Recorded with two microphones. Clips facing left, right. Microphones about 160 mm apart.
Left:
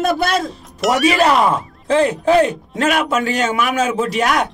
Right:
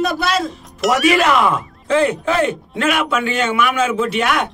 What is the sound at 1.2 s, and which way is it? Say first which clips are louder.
Speech: left 1 dB; 35° left (ahead or behind).